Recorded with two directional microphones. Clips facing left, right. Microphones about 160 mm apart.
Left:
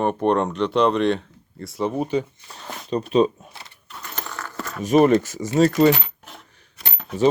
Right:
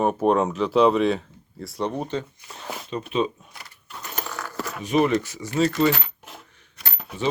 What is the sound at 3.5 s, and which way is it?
Power windows, 25° left (ahead or behind).